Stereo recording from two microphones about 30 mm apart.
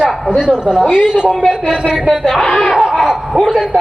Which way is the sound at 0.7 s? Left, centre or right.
Right.